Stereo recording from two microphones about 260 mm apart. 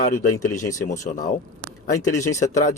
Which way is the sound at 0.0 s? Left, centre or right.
Left.